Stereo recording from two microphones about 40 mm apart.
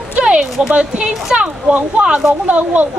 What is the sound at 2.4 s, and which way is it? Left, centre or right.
Speech, right.